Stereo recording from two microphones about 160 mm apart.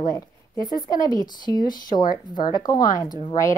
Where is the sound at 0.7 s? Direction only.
25° left (ahead or behind).